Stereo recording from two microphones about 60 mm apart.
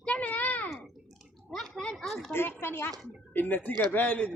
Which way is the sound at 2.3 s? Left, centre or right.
Left.